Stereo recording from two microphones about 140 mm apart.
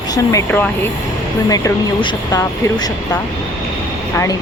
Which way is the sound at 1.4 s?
25° left (ahead or behind).